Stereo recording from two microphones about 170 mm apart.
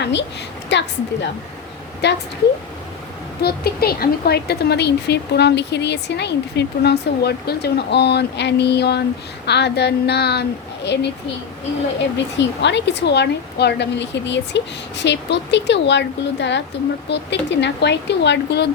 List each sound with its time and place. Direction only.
0.0 s speech: 90° left
3.4 s speech: 65° left (ahead or behind)
9.5 s female singing: 85° left
12.1 s speech: 90° left